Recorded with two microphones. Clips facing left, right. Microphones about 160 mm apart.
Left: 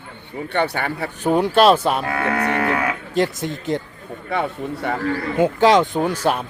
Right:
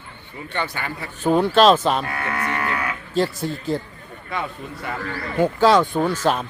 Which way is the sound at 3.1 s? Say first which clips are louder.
Even; 20° left (ahead or behind).